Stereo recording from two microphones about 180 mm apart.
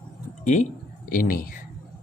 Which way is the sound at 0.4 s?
40° left (ahead or behind).